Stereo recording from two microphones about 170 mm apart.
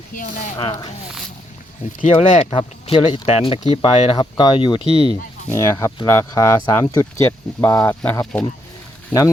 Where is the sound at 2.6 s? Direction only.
30° left (ahead or behind).